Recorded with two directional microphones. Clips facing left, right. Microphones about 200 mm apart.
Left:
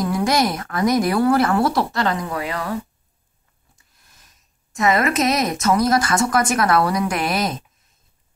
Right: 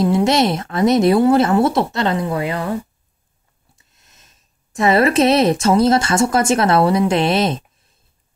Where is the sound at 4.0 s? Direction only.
25° right (ahead or behind).